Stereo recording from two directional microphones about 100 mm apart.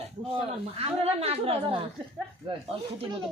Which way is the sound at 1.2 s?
75° right (ahead or behind).